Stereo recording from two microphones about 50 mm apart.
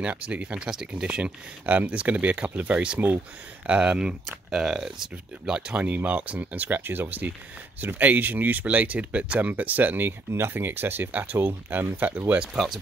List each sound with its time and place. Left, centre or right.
0.0 s speech: right
0.7 s speech: centre; by 2.8 s right
3.6 s speech: right
4.3 s speech: centre
5.7 s speech: right
11.1 s speech: right
12.6 s speech: centre